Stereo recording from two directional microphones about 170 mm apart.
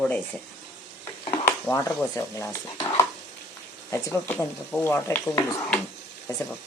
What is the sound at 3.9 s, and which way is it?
Speech, 15° left (ahead or behind).